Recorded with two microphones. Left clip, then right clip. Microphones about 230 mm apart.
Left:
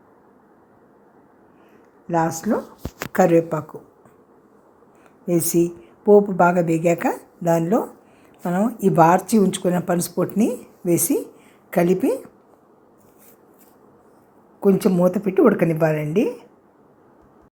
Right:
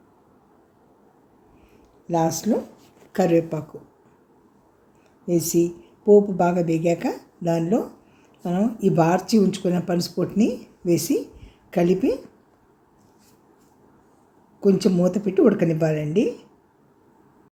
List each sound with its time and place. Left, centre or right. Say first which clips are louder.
2.0 s speech: left 1 dB; centre
5.2 s speech: left 1 dB; left
6.3 s speech: left 4 dB; centre
14.6 s speech: left 2 dB; centre